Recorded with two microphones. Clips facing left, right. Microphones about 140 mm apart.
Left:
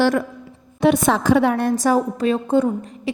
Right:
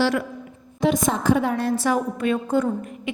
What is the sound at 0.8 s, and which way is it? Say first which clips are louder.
A woman's voice: left 4 dB; 65° left (ahead or behind).